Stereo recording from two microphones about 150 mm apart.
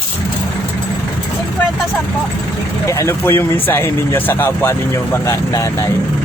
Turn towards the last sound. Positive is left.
turn(degrees=20)  # may be behind; listen again after turning